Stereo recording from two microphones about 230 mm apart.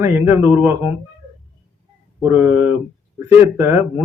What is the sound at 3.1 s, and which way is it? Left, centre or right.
Speech, centre.